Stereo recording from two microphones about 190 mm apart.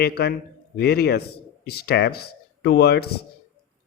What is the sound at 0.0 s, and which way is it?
A man's voice, 55° left (ahead or behind).